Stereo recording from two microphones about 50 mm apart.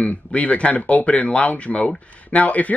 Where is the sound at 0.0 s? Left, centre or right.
Left.